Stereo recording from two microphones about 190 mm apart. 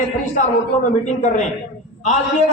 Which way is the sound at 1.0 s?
40° left (ahead or behind).